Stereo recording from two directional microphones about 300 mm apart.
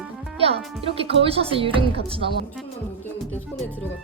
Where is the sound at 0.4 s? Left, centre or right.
Centre.